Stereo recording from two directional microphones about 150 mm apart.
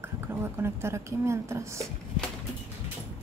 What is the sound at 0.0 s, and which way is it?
Speech, 15° right (ahead or behind).